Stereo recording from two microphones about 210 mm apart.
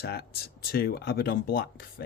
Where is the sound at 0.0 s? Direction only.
50° left (ahead or behind).